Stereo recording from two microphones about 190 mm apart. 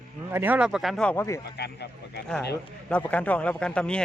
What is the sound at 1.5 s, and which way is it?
Speech, 60° left (ahead or behind).